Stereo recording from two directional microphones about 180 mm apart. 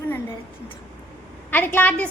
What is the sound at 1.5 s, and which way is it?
Speech, 10° left (ahead or behind).